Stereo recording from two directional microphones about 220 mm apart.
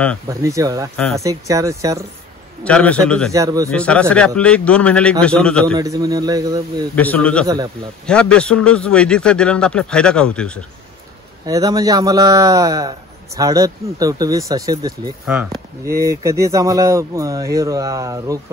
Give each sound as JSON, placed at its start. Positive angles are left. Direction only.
{"t": 0.3, "sound": "speech", "side_deg": -15}
{"t": 0.9, "sound": "a man's voice", "side_deg": 5}
{"t": 1.2, "sound": "speech", "side_deg": -15}
{"t": 2.6, "sound": "a man's voice", "side_deg": 5}
{"t": 3.3, "sound": "speech", "side_deg": -15}
{"t": 3.7, "sound": "a man's voice", "side_deg": 5}
{"t": 5.8, "sound": "speech", "side_deg": -15}
{"t": 7.0, "sound": "a man's voice", "side_deg": 5}
{"t": 7.4, "sound": "speech", "side_deg": -20}
{"t": 8.1, "sound": "a man's voice", "side_deg": 5}
{"t": 11.4, "sound": "speech", "side_deg": -15}
{"t": 15.2, "sound": "speech", "side_deg": -5}